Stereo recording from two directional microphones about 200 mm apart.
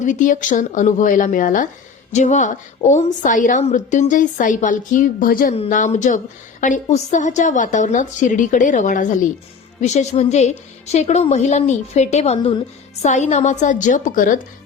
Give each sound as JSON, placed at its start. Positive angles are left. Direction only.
{"t": 0.0, "sound": "a woman's voice", "side_deg": 40}